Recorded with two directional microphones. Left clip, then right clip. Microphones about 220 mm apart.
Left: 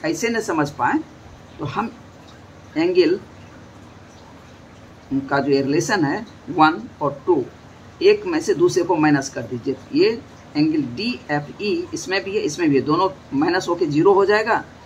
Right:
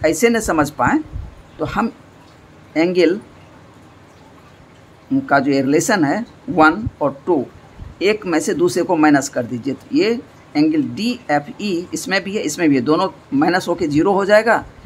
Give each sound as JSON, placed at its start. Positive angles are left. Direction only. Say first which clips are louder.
{"t": 0.0, "sound": "speech", "louder": "right 7 dB", "side_deg": -35}
{"t": 5.3, "sound": "speech", "louder": "right 4 dB", "side_deg": -35}